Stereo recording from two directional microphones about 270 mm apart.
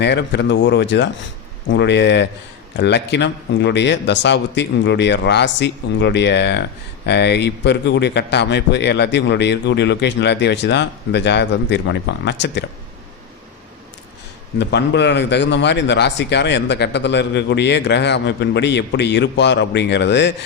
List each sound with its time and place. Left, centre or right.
0.0 s speech: left
14.6 s speech: left